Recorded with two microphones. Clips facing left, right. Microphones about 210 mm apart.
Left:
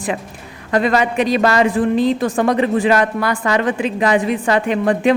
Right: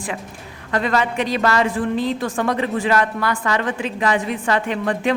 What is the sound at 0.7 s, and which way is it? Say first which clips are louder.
A woman's voice: left 4 dB; 15° left (ahead or behind).